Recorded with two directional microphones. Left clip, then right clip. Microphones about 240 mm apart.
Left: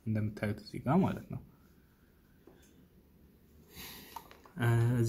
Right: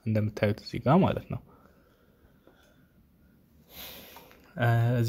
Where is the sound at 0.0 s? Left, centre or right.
Right.